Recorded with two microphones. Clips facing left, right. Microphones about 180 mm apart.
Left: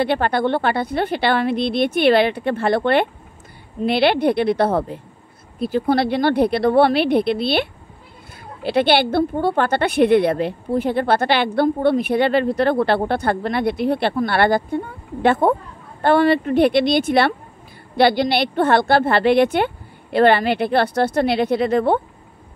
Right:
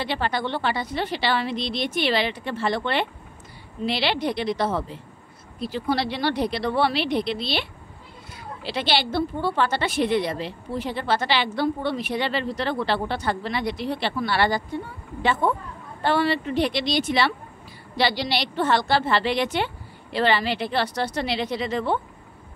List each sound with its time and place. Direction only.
0.0 s speech: 55° left (ahead or behind)
8.6 s speech: 55° left (ahead or behind)